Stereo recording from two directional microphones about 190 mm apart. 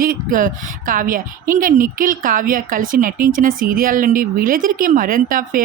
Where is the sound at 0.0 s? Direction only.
50° right (ahead or behind).